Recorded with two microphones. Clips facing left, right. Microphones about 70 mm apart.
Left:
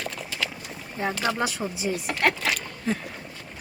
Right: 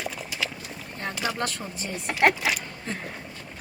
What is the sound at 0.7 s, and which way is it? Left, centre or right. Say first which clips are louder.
Boat: left 5 dB; centre.